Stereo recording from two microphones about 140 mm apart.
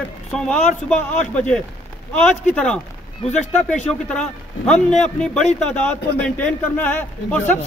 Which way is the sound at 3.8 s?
5° left (ahead or behind).